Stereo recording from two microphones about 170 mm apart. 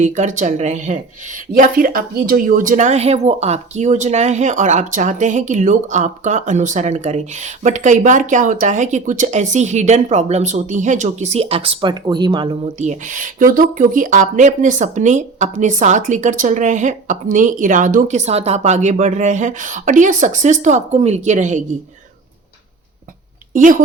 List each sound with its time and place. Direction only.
0.0 s speech: 45° right (ahead or behind)
1.5 s speech: 55° right (ahead or behind); by 12.7 s 30° right (ahead or behind)
12.8 s speech: 45° right (ahead or behind)
23.6 s speech: 50° right (ahead or behind)